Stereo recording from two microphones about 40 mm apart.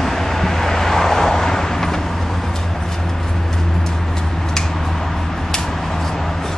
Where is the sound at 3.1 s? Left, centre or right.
Centre.